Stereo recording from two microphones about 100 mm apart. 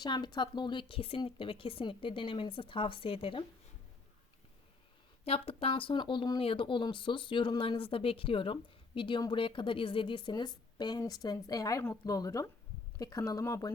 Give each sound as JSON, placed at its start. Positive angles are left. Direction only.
{"t": 0.0, "sound": "speech", "side_deg": 45}
{"t": 5.2, "sound": "speech", "side_deg": 75}
{"t": 6.4, "sound": "a woman's voice", "side_deg": 65}